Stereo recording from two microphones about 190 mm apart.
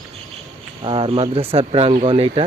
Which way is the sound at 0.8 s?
25° right (ahead or behind).